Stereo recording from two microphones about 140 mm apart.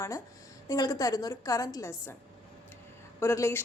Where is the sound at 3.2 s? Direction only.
20° left (ahead or behind).